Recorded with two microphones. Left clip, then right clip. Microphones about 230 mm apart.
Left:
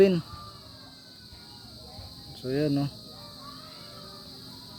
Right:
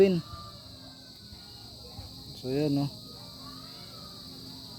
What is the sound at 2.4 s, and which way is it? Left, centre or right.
Speech, centre.